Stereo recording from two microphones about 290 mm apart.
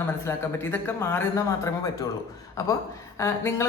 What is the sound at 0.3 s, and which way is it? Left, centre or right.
A man's voice, centre.